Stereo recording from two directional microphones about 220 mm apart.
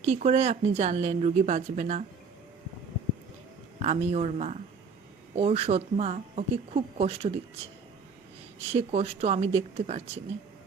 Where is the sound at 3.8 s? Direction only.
30° right (ahead or behind).